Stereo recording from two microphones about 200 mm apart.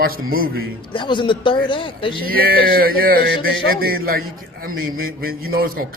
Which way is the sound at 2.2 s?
50° right (ahead or behind).